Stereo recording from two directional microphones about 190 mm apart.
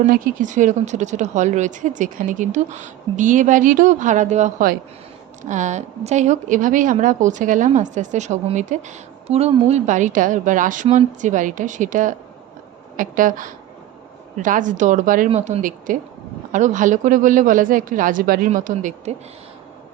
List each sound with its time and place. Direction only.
0.0 s a woman's voice: 40° right (ahead or behind)